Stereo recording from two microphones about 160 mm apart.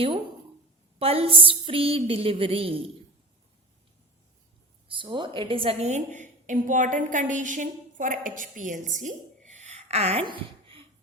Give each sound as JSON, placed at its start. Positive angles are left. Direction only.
{"t": 0.9, "sound": "a woman's voice", "side_deg": -35}
{"t": 4.9, "sound": "a woman's voice", "side_deg": -30}